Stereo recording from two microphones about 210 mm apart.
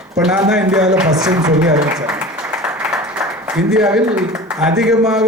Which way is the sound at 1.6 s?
5° right (ahead or behind).